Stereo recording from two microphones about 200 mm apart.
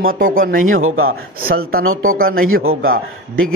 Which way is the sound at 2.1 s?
45° right (ahead or behind).